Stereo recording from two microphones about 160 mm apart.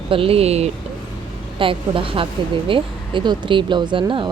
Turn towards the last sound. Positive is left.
turn(degrees=-30)  # may be behind; listen again after turning